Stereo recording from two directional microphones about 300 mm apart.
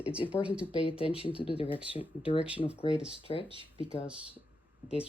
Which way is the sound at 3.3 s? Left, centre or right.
Centre.